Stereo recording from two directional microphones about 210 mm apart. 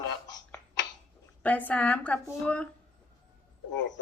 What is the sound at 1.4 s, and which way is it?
A woman's voice, 5° left (ahead or behind).